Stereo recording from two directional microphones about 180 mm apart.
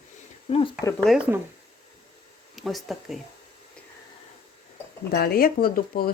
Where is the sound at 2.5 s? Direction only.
Centre (ahead or behind).